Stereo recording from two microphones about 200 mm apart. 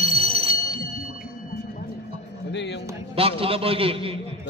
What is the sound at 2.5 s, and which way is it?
Speech, 60° left (ahead or behind).